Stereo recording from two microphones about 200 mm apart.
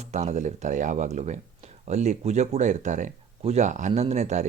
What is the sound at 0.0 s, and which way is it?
Speech, 35° right (ahead or behind).